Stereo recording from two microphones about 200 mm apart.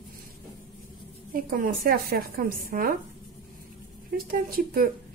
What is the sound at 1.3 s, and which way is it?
A woman's voice, 45° right (ahead or behind).